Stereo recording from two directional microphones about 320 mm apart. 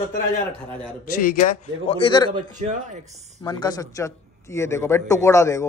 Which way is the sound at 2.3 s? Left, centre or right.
Right.